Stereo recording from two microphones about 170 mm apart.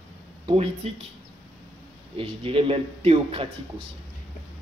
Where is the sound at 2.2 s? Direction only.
35° right (ahead or behind).